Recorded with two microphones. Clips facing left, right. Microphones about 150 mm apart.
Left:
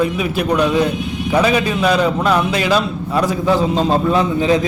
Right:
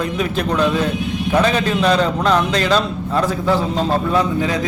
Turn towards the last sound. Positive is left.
turn(degrees=20)  # may be behind; listen again after turning